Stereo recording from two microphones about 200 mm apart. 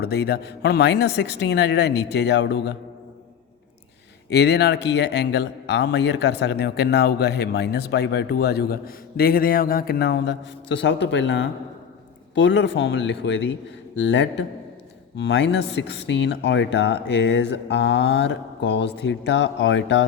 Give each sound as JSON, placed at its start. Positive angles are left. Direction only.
{"t": 0.0, "sound": "a man's voice", "side_deg": 55}
{"t": 4.3, "sound": "a man's voice", "side_deg": 55}